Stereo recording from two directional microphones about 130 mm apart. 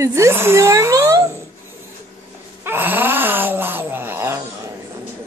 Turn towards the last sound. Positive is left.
turn(degrees=-20)  # may be behind; listen again after turning